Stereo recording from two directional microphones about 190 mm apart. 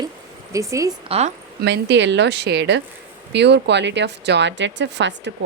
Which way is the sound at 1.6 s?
65° right (ahead or behind).